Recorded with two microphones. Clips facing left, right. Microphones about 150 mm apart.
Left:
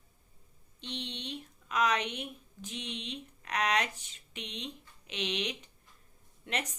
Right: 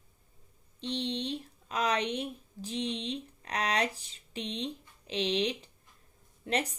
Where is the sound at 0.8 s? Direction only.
35° right (ahead or behind).